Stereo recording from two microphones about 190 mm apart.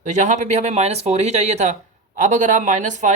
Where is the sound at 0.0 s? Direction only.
40° right (ahead or behind).